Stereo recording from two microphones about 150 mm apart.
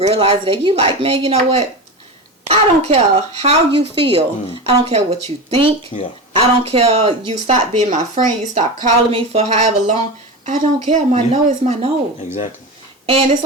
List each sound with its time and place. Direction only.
0.0 s a woman's voice: 40° right (ahead or behind); by 8.6 s 55° right (ahead or behind)
9.1 s a woman's voice: 45° right (ahead or behind)
13.1 s a woman's voice: 45° right (ahead or behind)